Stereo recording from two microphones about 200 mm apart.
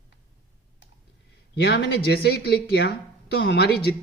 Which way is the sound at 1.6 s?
60° left (ahead or behind).